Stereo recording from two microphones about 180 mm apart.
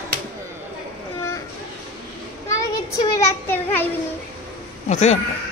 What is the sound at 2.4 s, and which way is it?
A child's voice, 15° left (ahead or behind).